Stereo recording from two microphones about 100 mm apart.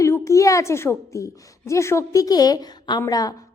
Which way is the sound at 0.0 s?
30° left (ahead or behind).